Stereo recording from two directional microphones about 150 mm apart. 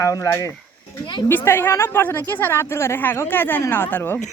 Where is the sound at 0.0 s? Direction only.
20° left (ahead or behind).